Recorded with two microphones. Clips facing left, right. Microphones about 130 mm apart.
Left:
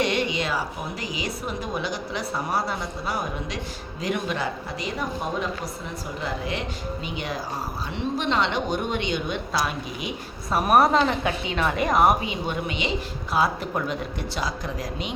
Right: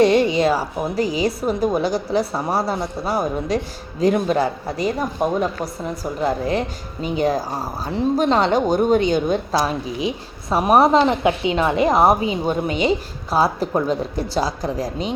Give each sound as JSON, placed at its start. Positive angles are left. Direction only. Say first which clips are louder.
{"t": 0.0, "sound": "a woman's voice", "louder": "right 10 dB", "side_deg": -35}